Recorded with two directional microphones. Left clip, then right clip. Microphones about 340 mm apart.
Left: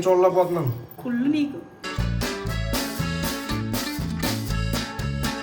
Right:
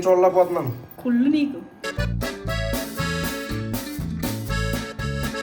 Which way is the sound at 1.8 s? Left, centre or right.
Centre.